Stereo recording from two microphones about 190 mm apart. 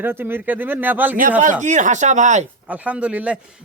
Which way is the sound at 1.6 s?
40° right (ahead or behind).